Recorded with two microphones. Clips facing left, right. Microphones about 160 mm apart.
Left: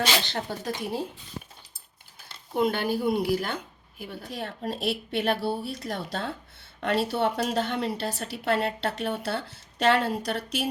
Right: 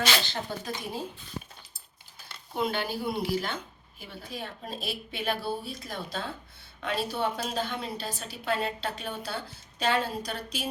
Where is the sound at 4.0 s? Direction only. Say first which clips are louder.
Left 4 dB; 65° left (ahead or behind).